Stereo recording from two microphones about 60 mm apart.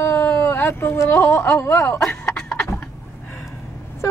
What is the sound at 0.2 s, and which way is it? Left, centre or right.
Speech, left.